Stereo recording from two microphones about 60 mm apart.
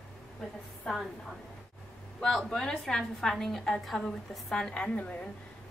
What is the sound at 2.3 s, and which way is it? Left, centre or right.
A woman's voice, centre.